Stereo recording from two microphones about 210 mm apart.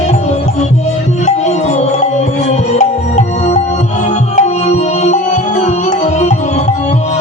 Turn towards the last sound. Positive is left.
turn(degrees=35)  # may be behind; listen again after turning